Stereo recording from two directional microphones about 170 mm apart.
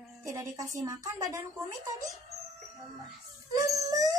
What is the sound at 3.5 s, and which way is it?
Dog, 20° right (ahead or behind).